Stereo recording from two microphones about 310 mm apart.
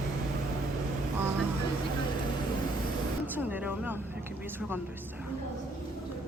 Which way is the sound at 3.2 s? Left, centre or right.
Centre.